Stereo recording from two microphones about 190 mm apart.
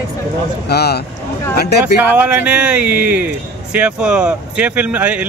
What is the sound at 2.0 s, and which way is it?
Speech, 10° right (ahead or behind).